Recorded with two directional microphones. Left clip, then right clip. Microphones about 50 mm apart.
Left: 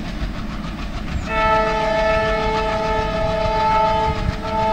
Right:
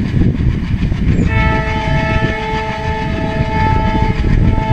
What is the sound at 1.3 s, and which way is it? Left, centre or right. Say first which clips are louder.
Train: left 3 dB; centre.